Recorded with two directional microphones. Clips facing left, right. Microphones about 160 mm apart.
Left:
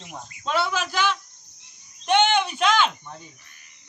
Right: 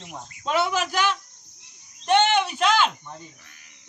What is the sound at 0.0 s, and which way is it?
Speech, centre (ahead or behind).